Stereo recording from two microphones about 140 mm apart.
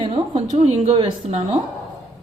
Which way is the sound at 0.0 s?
45° right (ahead or behind).